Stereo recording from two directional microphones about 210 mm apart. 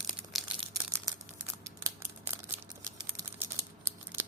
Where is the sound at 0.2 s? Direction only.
5° right (ahead or behind).